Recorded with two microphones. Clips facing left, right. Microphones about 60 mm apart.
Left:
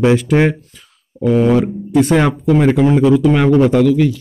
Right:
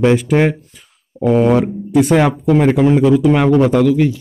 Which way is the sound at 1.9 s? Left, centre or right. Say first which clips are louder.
Right 1 dB; centre.